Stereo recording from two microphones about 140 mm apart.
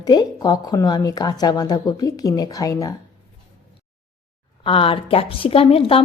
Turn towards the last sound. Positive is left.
turn(degrees=40)  # may be behind; listen again after turning